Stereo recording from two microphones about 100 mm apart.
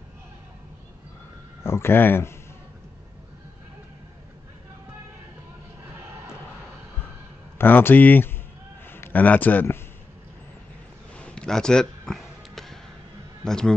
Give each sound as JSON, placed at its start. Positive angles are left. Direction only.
{"t": 1.6, "sound": "speech", "side_deg": 25}
{"t": 7.5, "sound": "a man's voice", "side_deg": 20}
{"t": 11.1, "sound": "a sound", "side_deg": 10}
{"t": 13.4, "sound": "a man's voice", "side_deg": 5}